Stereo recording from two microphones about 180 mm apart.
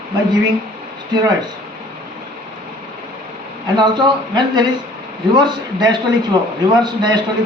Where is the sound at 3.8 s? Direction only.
25° right (ahead or behind).